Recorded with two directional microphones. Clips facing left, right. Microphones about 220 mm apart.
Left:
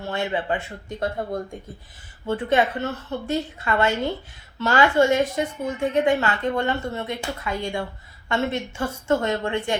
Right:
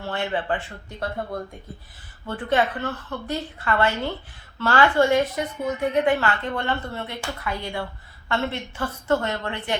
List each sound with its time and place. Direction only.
0.1 s a woman's voice: 20° left (ahead or behind)
2.6 s a woman's voice: 25° left (ahead or behind)